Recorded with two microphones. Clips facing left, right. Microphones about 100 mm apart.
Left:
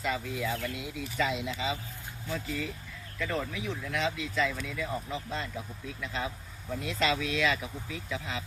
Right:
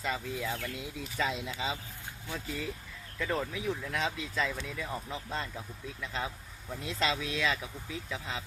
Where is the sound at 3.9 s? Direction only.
35° right (ahead or behind).